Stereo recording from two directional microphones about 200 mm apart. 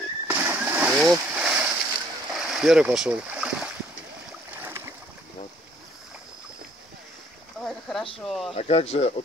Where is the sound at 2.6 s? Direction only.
5° right (ahead or behind).